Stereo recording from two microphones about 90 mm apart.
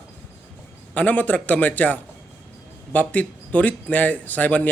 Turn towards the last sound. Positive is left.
turn(degrees=15)  # may be behind; listen again after turning